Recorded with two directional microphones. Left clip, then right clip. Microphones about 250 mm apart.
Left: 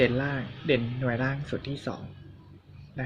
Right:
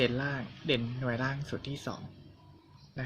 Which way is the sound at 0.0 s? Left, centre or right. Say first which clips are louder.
Left 5 dB; centre.